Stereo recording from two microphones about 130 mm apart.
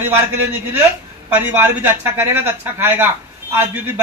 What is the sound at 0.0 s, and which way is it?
Speech, 15° right (ahead or behind).